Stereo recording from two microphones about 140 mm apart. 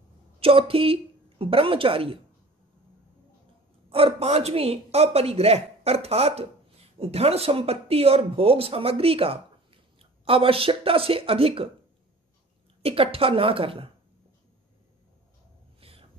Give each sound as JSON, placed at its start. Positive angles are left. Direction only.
{"t": 0.4, "sound": "a woman's voice", "side_deg": -40}
{"t": 3.9, "sound": "speech", "side_deg": -45}
{"t": 12.8, "sound": "speech", "side_deg": -40}
{"t": 15.8, "sound": "a sound", "side_deg": -45}